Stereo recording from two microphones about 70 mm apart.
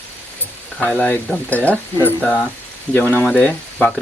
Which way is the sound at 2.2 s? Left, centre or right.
Centre.